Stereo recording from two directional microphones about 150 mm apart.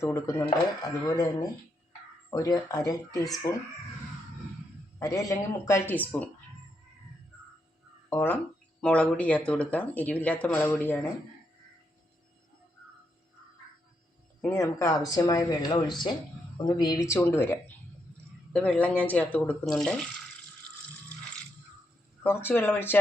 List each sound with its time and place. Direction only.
0.0 s speech: 15° left (ahead or behind)
4.9 s speech: 20° left (ahead or behind)
8.1 s speech: 15° left (ahead or behind)
14.4 s speech: 15° left (ahead or behind)
22.2 s speech: 15° left (ahead or behind)